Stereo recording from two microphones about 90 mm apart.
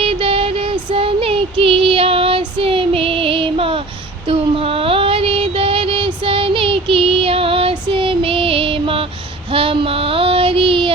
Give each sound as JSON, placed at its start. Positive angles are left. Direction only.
{"t": 0.0, "sound": "female singing", "side_deg": -90}
{"t": 4.3, "sound": "a sound", "side_deg": -85}
{"t": 9.5, "sound": "child singing", "side_deg": -85}